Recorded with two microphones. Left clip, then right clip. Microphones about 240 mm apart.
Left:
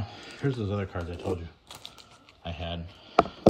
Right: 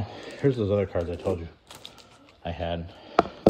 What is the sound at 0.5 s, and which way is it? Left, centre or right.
Speech, left.